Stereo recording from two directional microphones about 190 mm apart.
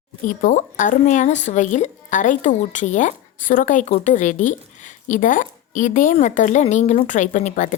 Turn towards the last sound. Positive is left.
turn(degrees=40)  # may be behind; listen again after turning